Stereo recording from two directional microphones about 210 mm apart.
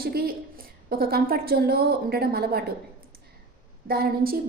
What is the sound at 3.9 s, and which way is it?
Speech, 45° right (ahead or behind).